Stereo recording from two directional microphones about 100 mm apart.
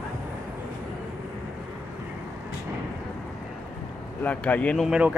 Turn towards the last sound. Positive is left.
turn(degrees=-10)  # may be behind; listen again after turning